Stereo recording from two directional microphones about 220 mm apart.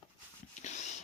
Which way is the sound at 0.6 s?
30° left (ahead or behind).